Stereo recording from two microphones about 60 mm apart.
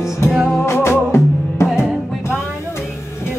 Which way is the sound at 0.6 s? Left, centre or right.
Left.